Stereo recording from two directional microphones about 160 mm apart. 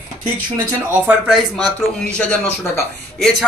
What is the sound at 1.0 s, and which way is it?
Speech, 5° right (ahead or behind).